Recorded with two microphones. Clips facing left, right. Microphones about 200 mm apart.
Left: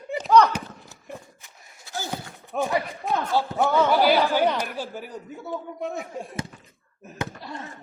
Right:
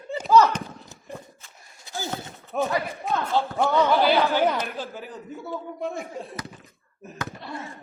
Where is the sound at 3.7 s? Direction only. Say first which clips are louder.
Left 1 dB; 10° left (ahead or behind).